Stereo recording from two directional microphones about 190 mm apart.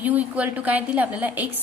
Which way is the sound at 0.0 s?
10° right (ahead or behind).